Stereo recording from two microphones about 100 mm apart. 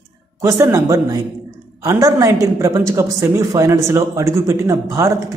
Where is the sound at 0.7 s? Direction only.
35° right (ahead or behind).